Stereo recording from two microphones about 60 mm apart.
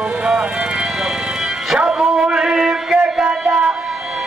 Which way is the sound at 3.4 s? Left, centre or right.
Centre.